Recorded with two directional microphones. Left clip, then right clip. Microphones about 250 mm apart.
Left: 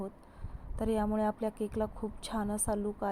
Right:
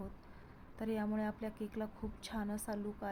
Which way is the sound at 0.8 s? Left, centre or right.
Centre.